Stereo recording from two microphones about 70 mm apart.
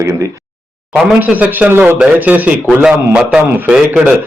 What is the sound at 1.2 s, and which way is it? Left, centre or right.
A man's voice, right.